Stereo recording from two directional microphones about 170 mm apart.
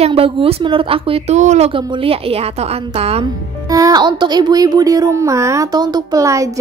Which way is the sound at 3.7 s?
20° right (ahead or behind).